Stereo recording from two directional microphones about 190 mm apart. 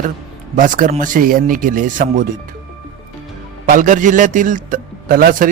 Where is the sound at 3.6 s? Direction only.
45° right (ahead or behind).